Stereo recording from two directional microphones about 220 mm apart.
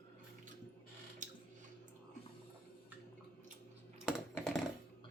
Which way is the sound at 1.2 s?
35° right (ahead or behind).